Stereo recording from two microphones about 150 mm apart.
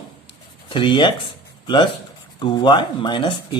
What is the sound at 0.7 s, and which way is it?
Speech, 30° left (ahead or behind).